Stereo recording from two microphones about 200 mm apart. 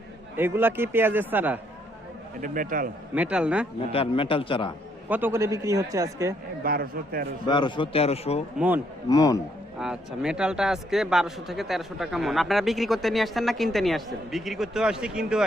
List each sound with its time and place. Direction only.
0.3 s a man's voice: 10° right (ahead or behind)
2.4 s speech: 45° right (ahead or behind)
3.2 s a man's voice: 5° right (ahead or behind)
3.9 s a man's voice: 25° left (ahead or behind)
5.0 s a man's voice: 10° right (ahead or behind)
6.6 s speech: 45° right (ahead or behind)
7.4 s a man's voice: 20° left (ahead or behind)
8.5 s a man's voice: 10° right (ahead or behind)
9.0 s a man's voice: 15° left (ahead or behind)
9.7 s a man's voice: 5° right (ahead or behind)